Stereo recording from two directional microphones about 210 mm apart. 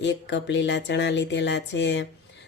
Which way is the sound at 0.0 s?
55° left (ahead or behind).